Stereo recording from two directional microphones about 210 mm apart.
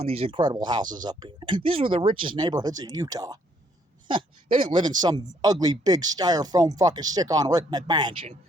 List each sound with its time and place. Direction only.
0.0 s speech: 30° right (ahead or behind)